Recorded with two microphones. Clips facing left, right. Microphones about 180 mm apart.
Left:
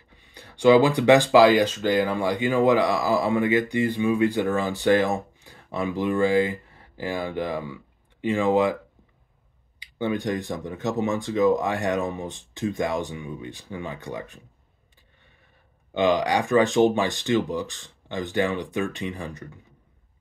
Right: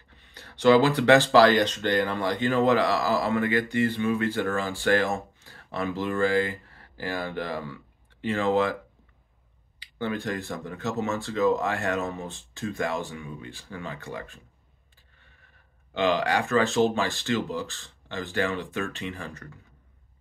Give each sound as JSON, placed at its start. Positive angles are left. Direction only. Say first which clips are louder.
{"t": 0.1, "sound": "speech", "louder": "left 2 dB", "side_deg": 10}
{"t": 9.9, "sound": "speech", "louder": "left 4 dB", "side_deg": 20}
{"t": 15.9, "sound": "speech", "louder": "left 3 dB", "side_deg": 15}